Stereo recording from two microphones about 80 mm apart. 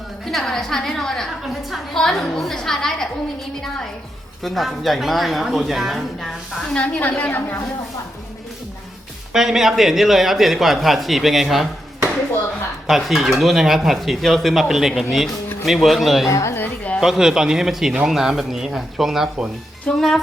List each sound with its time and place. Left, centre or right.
0.3 s a man's voice: centre
4.4 s a man's voice: centre
6.7 s a woman's voice: centre
9.3 s a man's voice: centre
12.9 s a man's voice: centre
16.3 s a woman's voice: left
16.6 s a sound: centre
17.0 s a man's voice: centre